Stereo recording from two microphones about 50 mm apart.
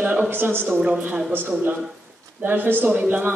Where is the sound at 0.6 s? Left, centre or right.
Centre.